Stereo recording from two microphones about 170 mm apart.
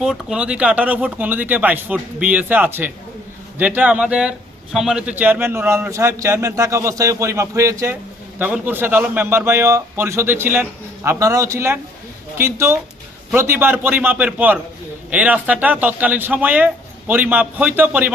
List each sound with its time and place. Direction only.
0.0 s a man's voice: 5° right (ahead or behind)